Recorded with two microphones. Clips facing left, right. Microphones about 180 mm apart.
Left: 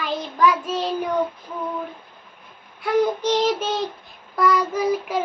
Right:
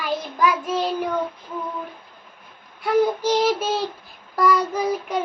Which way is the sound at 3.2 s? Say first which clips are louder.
Right 1 dB; 10° right (ahead or behind).